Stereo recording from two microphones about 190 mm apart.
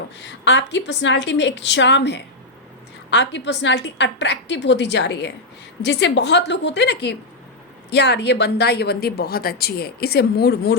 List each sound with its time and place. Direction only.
0.2 s a woman's voice: 65° left (ahead or behind)